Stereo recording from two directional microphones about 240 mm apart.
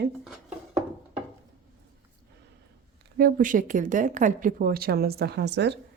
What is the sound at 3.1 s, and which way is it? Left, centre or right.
Speech, right.